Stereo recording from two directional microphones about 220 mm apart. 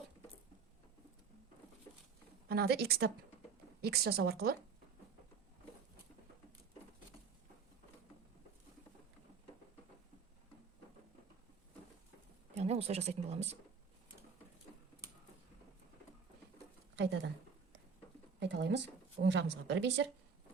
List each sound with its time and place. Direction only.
2.5 s a woman's voice: 45° right (ahead or behind)
12.5 s speech: 30° right (ahead or behind)
16.9 s a sound: 50° right (ahead or behind)
18.3 s a woman's voice: 50° right (ahead or behind)